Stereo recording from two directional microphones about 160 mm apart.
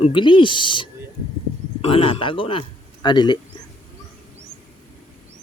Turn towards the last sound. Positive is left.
turn(degrees=30)  # may be behind; listen again after turning